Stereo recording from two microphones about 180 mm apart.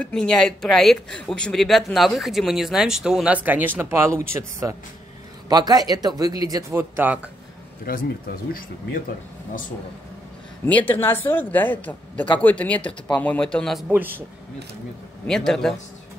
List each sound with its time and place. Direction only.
0.0 s a man's voice: 5° left (ahead or behind); by 7.2 s 10° right (ahead or behind)
7.9 s speech: 55° left (ahead or behind)
10.6 s speech: 10° left (ahead or behind); by 14.2 s 10° right (ahead or behind)
15.2 s speech: centre (ahead or behind)